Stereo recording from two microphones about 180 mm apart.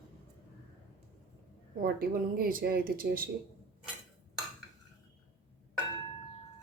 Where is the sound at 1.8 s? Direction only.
55° right (ahead or behind).